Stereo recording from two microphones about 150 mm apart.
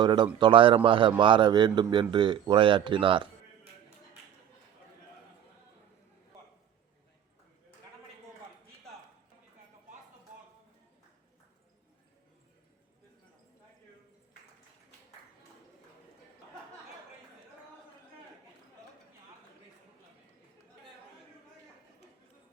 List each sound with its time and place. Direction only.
0.0 s a man's voice: 30° right (ahead or behind)